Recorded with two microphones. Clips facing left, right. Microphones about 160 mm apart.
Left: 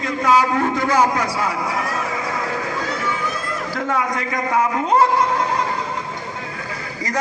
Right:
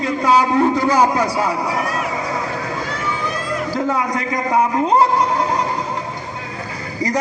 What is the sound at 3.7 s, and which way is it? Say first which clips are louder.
Speech: right 1 dB; 30° right (ahead or behind).